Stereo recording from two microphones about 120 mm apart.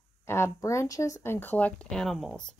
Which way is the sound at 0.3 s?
25° left (ahead or behind).